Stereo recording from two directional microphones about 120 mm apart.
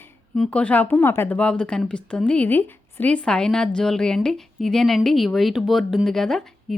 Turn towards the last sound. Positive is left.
turn(degrees=5)  # may be behind; listen again after turning